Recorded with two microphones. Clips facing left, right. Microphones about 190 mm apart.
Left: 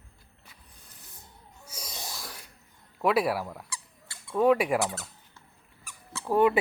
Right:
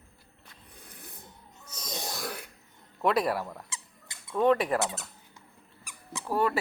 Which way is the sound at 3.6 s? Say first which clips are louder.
Left 2 dB; 20° right (ahead or behind).